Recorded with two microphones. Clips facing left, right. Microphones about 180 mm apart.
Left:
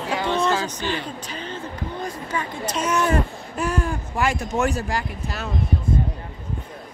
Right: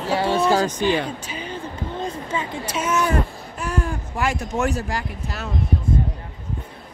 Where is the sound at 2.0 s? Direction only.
25° right (ahead or behind).